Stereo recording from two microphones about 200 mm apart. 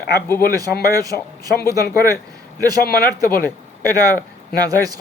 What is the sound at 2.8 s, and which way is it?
Speech, 50° left (ahead or behind).